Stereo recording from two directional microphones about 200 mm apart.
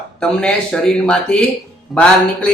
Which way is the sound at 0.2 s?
5° left (ahead or behind).